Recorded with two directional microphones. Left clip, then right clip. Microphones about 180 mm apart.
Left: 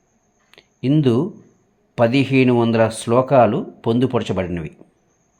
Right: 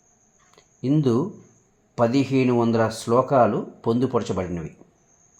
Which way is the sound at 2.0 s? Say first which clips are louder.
Left 5 dB; 20° left (ahead or behind).